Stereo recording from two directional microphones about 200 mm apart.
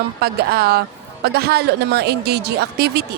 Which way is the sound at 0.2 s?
50° right (ahead or behind).